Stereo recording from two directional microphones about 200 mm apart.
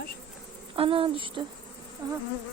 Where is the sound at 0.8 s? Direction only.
25° right (ahead or behind).